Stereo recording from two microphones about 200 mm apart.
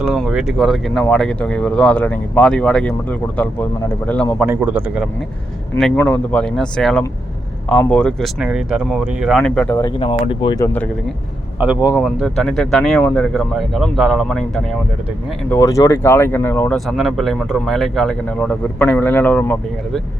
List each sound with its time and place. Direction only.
0.0 s speech: 5° right (ahead or behind)
4.4 s a man's voice: 10° right (ahead or behind)
5.7 s speech: 5° left (ahead or behind)
10.0 s speech: 25° left (ahead or behind)
11.6 s speech: 5° right (ahead or behind)
15.4 s speech: 15° left (ahead or behind)
16.7 s speech: centre (ahead or behind)